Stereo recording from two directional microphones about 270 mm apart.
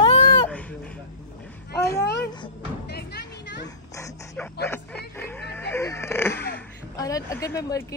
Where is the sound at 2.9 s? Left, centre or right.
Left.